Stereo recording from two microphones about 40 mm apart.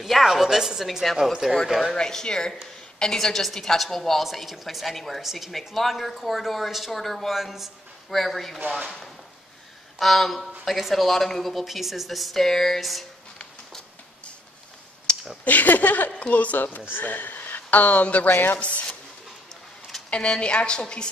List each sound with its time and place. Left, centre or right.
0.0 s a woman's voice: centre
2.0 s a woman's voice: centre
8.6 s speech: right
9.9 s speech: centre
15.1 s a sound: left
15.4 s a woman's voice: left
18.3 s speech: left
18.6 s a woman's voice: left
20.1 s a woman's voice: left